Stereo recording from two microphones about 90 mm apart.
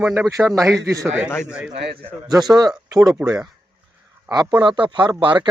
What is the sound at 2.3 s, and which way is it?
Speech, 50° right (ahead or behind).